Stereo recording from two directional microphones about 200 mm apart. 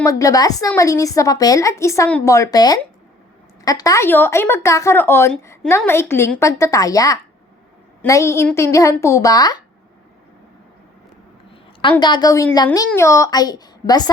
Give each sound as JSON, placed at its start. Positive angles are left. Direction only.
{"t": 0.0, "sound": "speech", "side_deg": 15}
{"t": 11.8, "sound": "a woman's voice", "side_deg": 25}